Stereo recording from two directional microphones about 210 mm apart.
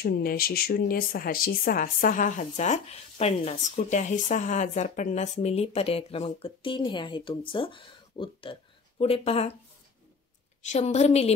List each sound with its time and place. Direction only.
0.0 s speech: 45° left (ahead or behind); by 9.5 s 30° left (ahead or behind)
10.6 s speech: 35° left (ahead or behind)